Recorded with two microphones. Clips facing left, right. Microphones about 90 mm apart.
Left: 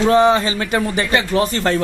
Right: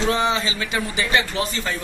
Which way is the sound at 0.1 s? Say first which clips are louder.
Left 8 dB; 50° left (ahead or behind).